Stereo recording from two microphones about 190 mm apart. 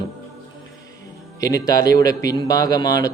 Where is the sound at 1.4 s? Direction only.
20° left (ahead or behind).